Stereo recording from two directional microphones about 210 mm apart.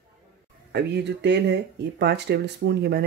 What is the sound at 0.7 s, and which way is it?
Speech, 55° right (ahead or behind).